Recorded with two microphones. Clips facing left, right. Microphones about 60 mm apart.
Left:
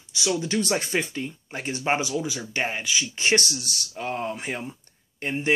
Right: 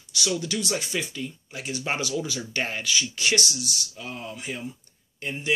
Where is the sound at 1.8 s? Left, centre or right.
Left.